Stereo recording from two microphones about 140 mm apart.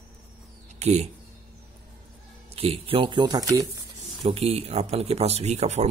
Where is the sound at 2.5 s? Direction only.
45° right (ahead or behind); by 3.6 s 25° right (ahead or behind).